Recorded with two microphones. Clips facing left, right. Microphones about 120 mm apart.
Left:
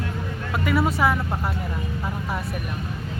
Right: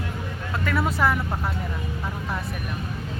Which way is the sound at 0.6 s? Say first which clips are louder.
Left 2 dB; 10° left (ahead or behind).